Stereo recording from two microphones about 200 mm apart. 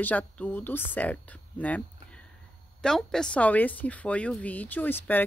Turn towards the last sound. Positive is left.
turn(degrees=10)  # may be behind; listen again after turning